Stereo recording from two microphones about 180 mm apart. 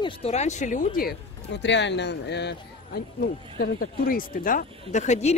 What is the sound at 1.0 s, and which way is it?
Speech, 65° left (ahead or behind).